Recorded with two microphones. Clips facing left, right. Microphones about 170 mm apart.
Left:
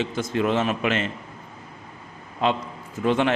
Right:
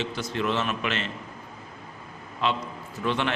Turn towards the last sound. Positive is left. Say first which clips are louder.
# left 6 dB
turn(degrees=45)  # may be behind; listen again after turning